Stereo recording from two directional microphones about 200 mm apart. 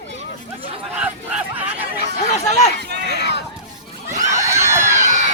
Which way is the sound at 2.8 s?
55° right (ahead or behind).